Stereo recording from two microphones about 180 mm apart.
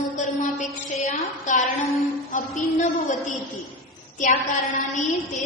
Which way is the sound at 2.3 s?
45° left (ahead or behind).